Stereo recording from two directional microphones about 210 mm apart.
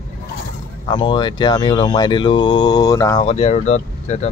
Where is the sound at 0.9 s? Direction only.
20° left (ahead or behind).